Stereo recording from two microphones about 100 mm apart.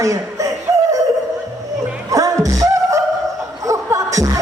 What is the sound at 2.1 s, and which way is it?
Music, 35° right (ahead or behind).